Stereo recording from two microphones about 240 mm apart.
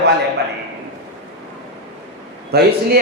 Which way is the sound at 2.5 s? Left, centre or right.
Right.